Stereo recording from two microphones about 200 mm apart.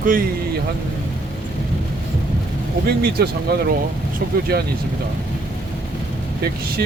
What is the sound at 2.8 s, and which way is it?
Speech, 50° right (ahead or behind).